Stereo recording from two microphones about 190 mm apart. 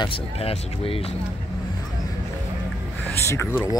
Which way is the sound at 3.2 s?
15° left (ahead or behind).